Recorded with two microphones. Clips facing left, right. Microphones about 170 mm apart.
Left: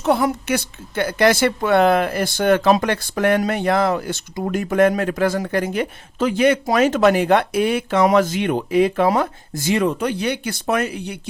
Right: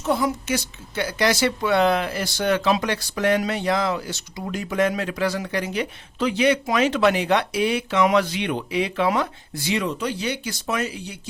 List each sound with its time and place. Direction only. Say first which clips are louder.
0.0 s a woman's voice: left 4 dB; 60° left (ahead or behind)